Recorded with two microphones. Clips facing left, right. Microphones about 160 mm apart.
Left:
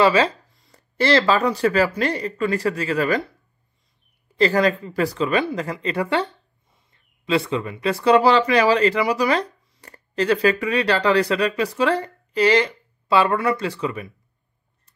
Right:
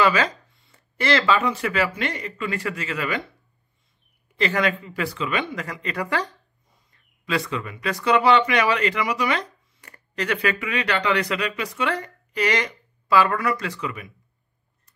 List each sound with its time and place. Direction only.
0.0 s speech: 30° left (ahead or behind)
4.4 s speech: 35° left (ahead or behind)